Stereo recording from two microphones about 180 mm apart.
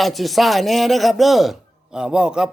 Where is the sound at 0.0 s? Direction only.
Centre (ahead or behind).